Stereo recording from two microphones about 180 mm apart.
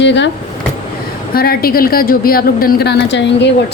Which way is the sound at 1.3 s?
55° left (ahead or behind).